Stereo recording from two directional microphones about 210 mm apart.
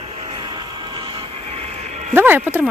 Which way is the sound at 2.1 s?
10° right (ahead or behind).